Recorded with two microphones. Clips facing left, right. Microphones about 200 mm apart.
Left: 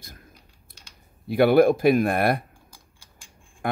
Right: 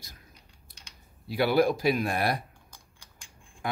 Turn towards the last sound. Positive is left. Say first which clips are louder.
# left 5 dB
turn(degrees=55)  # may be behind; listen again after turning